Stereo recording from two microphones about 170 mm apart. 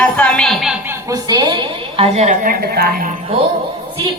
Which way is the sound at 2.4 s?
65° right (ahead or behind).